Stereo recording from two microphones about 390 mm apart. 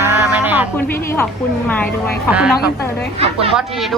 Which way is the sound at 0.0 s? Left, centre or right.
Centre.